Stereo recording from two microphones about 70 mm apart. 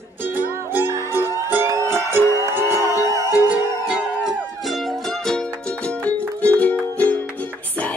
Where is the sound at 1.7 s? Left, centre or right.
Right.